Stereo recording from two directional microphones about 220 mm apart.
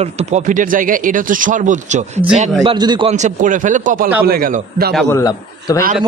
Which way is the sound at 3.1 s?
35° right (ahead or behind).